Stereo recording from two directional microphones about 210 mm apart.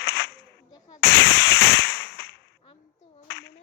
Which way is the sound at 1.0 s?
50° left (ahead or behind).